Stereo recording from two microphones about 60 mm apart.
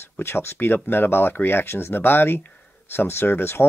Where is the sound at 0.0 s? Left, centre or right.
Left.